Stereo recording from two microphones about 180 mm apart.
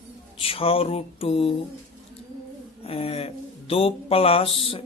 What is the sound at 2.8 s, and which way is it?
Speech, 35° left (ahead or behind).